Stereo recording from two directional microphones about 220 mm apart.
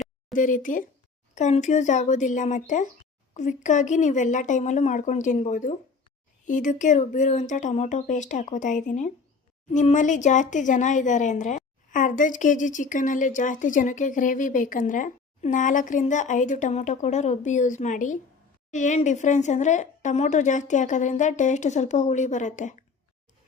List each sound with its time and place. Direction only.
0.3 s speech: 35° left (ahead or behind)